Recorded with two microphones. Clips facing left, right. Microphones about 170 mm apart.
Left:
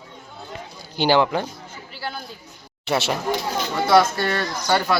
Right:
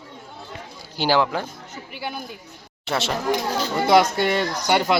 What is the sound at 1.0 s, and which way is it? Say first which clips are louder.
Speech: left 2 dB; centre (ahead or behind).